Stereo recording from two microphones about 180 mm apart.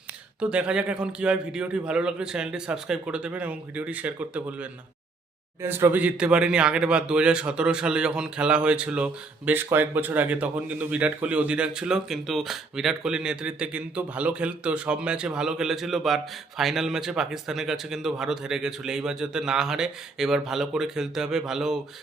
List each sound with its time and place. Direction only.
0.3 s speech: 5° right (ahead or behind)
5.6 s speech: 10° right (ahead or behind)